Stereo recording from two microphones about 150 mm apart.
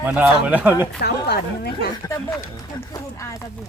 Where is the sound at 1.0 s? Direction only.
90° left.